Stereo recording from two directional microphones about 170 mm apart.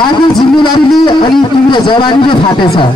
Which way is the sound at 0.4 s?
25° left (ahead or behind).